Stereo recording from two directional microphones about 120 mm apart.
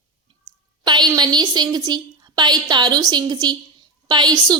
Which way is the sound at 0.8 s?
35° right (ahead or behind).